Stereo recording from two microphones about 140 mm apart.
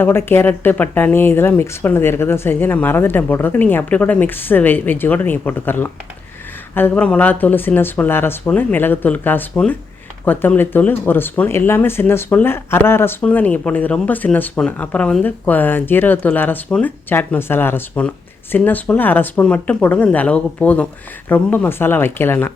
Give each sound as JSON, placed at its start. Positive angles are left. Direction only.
{"t": 0.0, "sound": "speech", "side_deg": 15}